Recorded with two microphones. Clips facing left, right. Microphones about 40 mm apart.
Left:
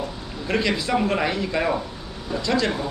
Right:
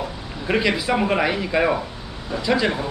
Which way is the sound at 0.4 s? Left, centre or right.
Centre.